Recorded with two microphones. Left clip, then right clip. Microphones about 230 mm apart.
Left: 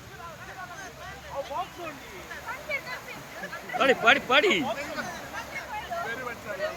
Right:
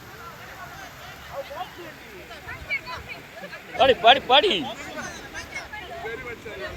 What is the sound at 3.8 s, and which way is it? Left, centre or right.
Speech, centre.